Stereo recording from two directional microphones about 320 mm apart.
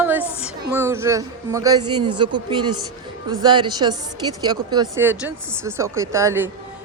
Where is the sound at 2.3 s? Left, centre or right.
Right.